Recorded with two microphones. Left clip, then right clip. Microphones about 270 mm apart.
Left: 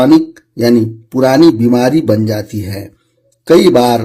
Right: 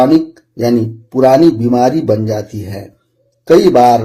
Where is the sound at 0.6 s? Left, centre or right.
Left.